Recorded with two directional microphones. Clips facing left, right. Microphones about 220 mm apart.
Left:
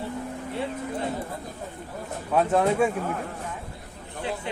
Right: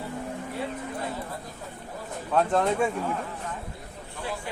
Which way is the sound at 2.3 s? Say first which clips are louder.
Left 2 dB; 10° left (ahead or behind).